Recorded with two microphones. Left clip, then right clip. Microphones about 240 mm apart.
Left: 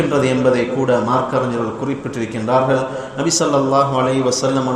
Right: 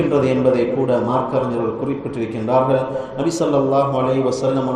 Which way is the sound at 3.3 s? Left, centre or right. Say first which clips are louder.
Left 2 dB; left.